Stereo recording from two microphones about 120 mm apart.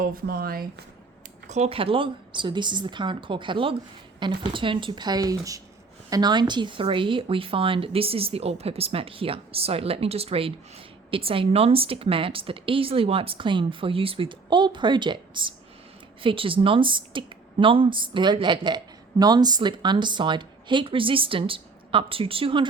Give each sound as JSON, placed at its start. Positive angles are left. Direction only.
{"t": 1.5, "sound": "a woman's voice", "side_deg": -65}